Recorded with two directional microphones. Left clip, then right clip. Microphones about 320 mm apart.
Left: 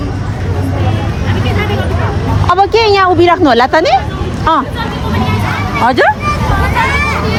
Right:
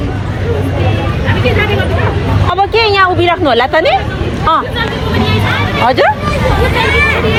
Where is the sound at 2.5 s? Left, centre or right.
Left.